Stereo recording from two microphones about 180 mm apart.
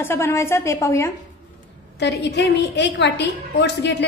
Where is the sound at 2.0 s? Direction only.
70° left (ahead or behind).